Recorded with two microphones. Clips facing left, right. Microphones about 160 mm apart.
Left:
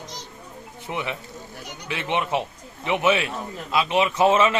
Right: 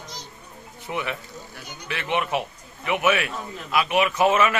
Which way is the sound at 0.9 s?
20° left (ahead or behind).